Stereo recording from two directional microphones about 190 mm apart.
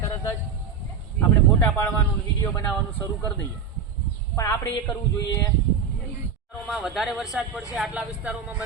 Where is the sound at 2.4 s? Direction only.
15° left (ahead or behind).